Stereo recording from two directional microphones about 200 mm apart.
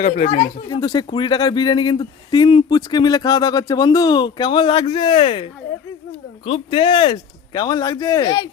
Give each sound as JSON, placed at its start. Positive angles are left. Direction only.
{"t": 0.0, "sound": "speech", "side_deg": 35}
{"t": 0.8, "sound": "speech", "side_deg": 20}